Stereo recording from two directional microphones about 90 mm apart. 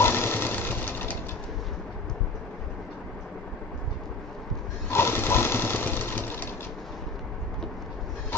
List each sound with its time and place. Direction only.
0.0 s engine: 25° left (ahead or behind)
4.9 s sewing machine: 25° left (ahead or behind)